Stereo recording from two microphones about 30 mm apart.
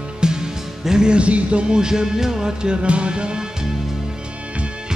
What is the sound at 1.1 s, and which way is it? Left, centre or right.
Music, right.